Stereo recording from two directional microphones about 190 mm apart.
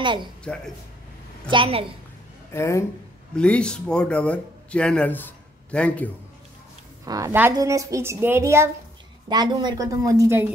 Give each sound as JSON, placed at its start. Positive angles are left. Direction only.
{"t": 0.0, "sound": "a woman's voice", "side_deg": -25}
{"t": 1.5, "sound": "a woman's voice", "side_deg": -30}
{"t": 2.5, "sound": "a woman's voice", "side_deg": 15}
{"t": 3.3, "sound": "speech", "side_deg": 5}
{"t": 7.1, "sound": "a woman's voice", "side_deg": -15}